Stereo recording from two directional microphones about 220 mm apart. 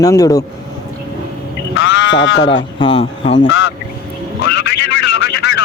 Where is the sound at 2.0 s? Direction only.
55° left (ahead or behind).